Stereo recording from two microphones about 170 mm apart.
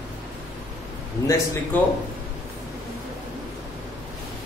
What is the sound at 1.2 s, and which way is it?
Speech, 20° left (ahead or behind).